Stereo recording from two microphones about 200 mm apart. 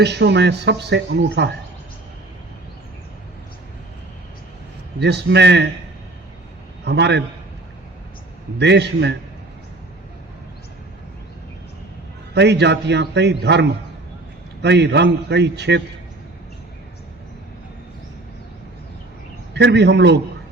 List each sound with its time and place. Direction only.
0.0 s speech: 60° right (ahead or behind)
4.9 s speech: 55° right (ahead or behind)
6.8 s speech: 60° right (ahead or behind)
8.5 s speech: 60° right (ahead or behind)
12.3 s speech: 60° right (ahead or behind)
19.5 s speech: 60° right (ahead or behind)